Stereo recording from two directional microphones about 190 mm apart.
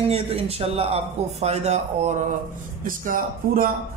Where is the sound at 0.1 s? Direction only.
30° right (ahead or behind).